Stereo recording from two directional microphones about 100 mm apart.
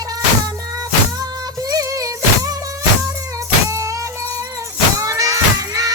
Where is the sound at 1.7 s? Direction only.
35° right (ahead or behind).